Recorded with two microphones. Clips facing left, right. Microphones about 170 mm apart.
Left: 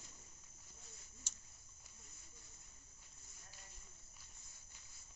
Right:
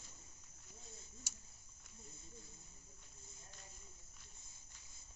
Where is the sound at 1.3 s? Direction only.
10° right (ahead or behind).